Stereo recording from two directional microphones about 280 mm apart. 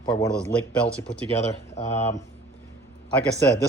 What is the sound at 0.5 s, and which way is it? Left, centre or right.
Speech, centre.